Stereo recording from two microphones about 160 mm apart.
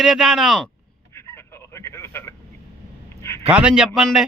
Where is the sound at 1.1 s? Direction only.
15° left (ahead or behind).